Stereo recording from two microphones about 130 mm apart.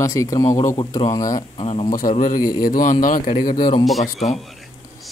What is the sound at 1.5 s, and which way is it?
Speech, 45° left (ahead or behind).